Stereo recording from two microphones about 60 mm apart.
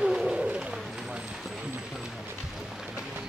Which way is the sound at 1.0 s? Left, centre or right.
Centre.